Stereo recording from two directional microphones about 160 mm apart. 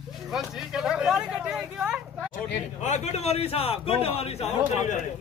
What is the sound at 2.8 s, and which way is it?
A man's voice, 45° left (ahead or behind).